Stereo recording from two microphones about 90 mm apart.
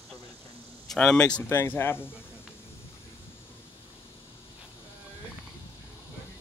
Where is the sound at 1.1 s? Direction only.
10° left (ahead or behind).